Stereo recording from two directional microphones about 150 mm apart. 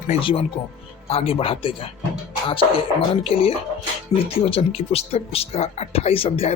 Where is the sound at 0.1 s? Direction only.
40° left (ahead or behind).